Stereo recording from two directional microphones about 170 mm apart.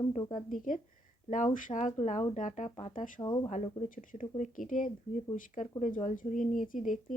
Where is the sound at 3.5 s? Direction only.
45° left (ahead or behind).